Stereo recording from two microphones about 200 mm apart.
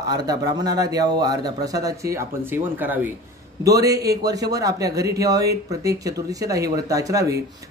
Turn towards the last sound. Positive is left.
turn(degrees=-15)  # may be behind; listen again after turning